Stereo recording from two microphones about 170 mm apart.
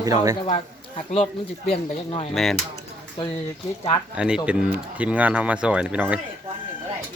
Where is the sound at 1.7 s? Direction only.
35° left (ahead or behind).